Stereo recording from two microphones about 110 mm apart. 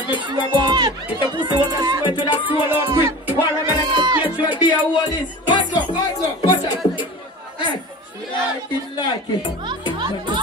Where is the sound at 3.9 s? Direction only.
40° right (ahead or behind).